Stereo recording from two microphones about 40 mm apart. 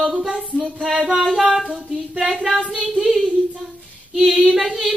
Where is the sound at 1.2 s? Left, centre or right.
Centre.